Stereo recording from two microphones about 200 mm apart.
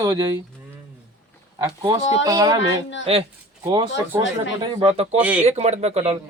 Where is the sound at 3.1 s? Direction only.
30° right (ahead or behind).